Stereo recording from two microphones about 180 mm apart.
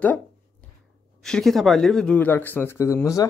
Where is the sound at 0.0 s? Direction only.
10° left (ahead or behind).